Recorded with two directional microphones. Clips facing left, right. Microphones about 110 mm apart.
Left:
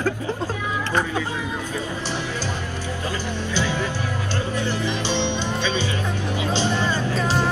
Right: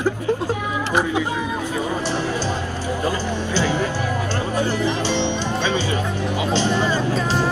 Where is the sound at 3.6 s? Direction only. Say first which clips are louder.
Right 4 dB; 45° right (ahead or behind).